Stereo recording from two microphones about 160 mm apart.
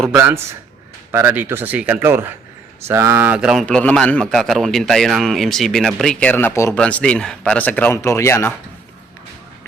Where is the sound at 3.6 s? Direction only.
10° left (ahead or behind).